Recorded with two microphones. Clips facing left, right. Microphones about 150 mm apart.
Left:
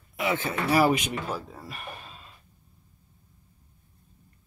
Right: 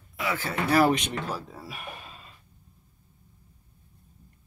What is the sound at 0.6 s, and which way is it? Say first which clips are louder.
Speech: even; 5° left (ahead or behind).